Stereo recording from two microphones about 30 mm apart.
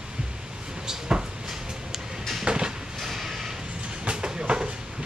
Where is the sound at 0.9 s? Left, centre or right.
Right.